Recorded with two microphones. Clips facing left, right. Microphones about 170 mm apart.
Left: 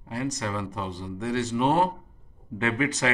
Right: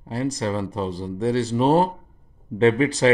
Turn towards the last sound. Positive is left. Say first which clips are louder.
# right 8 dB
turn(degrees=-30)  # may be behind; listen again after turning